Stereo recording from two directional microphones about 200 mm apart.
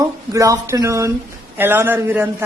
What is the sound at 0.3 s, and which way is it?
A woman's voice, 15° right (ahead or behind).